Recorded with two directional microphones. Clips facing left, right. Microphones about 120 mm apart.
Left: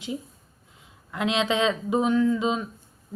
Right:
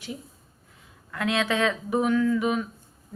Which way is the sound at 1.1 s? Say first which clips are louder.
Left 1 dB; 20° left (ahead or behind).